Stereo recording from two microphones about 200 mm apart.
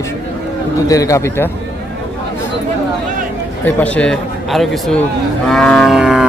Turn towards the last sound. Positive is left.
turn(degrees=0)  # may be behind; listen again after turning